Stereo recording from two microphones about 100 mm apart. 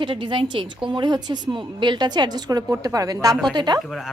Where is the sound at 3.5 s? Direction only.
45° right (ahead or behind).